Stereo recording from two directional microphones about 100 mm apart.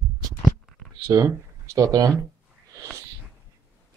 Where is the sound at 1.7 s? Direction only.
40° right (ahead or behind).